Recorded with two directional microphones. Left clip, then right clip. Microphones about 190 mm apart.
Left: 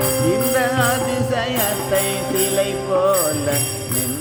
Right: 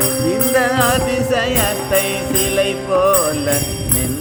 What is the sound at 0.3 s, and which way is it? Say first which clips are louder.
Jingle bell: right 4 dB; 20° right (ahead or behind).